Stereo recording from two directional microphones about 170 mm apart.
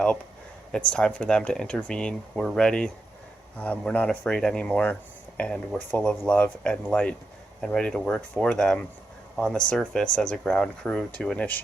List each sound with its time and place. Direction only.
0.9 s speech: 5° left (ahead or behind)